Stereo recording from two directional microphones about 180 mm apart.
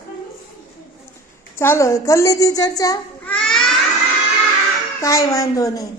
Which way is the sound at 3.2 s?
5° left (ahead or behind).